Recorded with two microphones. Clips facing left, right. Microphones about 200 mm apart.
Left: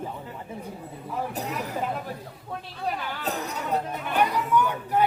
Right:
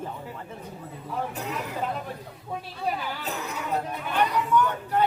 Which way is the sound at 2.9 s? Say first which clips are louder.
Right 1 dB; 10° right (ahead or behind).